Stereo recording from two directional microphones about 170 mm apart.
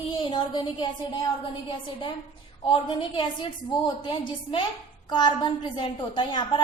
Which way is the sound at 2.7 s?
30° left (ahead or behind).